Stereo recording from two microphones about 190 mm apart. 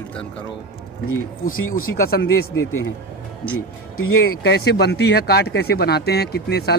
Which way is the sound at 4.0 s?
60° left (ahead or behind).